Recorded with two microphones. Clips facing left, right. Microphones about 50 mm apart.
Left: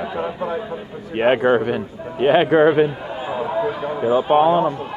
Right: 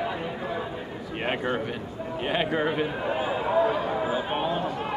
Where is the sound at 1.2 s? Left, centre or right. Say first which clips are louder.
Left 13 dB; left.